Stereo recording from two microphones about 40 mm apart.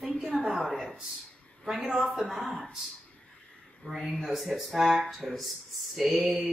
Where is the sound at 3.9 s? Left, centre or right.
Centre.